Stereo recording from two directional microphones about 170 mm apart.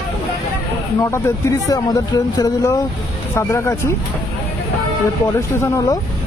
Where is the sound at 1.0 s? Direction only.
20° left (ahead or behind).